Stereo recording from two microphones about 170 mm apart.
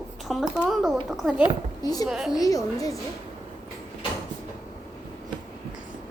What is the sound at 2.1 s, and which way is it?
Speech, centre (ahead or behind).